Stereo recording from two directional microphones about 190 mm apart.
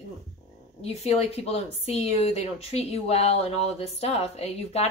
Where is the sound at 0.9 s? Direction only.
35° left (ahead or behind).